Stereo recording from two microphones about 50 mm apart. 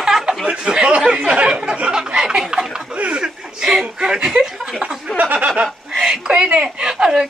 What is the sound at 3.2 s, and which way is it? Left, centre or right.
Chuckle, centre.